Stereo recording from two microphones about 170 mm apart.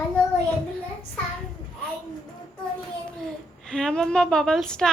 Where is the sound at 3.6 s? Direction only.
5° left (ahead or behind).